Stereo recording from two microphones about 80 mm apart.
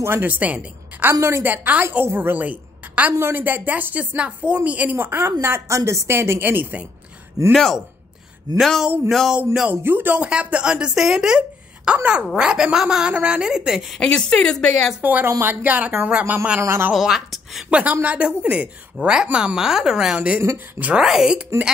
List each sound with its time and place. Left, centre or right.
0.0 s a woman's voice: right
7.5 s speech: centre
9.7 s speech: right; by 13.8 s centre
13.9 s speech: centre
15.0 s a woman's voice: right
15.2 s a woman's voice: right
15.6 s a woman's voice: centre
16.6 s a woman's voice: right
16.9 s speech: centre
17.6 s speech: centre
20.2 s a woman's voice: right
20.8 s speech: centre